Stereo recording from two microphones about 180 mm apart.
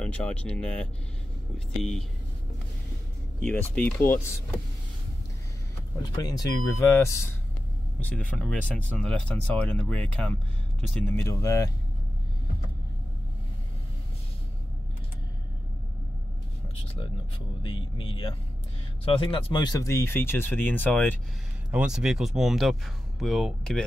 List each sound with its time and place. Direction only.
0.0 s speech: 5° left (ahead or behind)
3.3 s speech: 10° left (ahead or behind)
5.9 s speech: 20° left (ahead or behind)
17.6 s speech: 30° left (ahead or behind); by 21.2 s 10° left (ahead or behind)
21.6 s speech: 5° right (ahead or behind)